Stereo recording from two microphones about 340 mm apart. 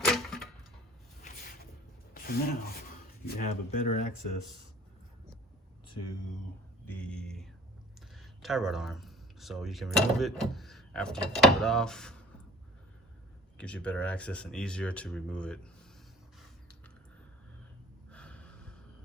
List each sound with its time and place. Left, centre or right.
0.0 s a sound: centre
2.1 s rub: left
3.2 s speech: left
6.8 s a sound: centre
8.1 s speech: centre
13.6 s speech: centre
18.1 s snort: centre